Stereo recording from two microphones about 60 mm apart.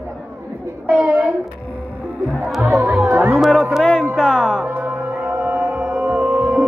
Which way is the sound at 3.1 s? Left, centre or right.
Right.